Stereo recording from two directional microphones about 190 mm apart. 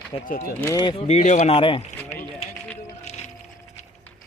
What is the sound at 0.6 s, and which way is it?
Speech, 20° left (ahead or behind).